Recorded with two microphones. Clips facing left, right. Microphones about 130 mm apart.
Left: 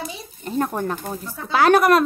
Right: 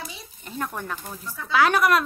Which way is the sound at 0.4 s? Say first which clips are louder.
Left 9 dB; 40° left (ahead or behind).